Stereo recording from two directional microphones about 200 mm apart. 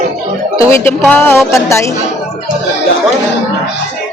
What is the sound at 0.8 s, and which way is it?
Speech, 10° left (ahead or behind).